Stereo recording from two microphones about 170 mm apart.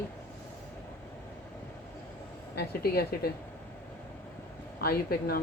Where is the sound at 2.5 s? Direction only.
65° left (ahead or behind).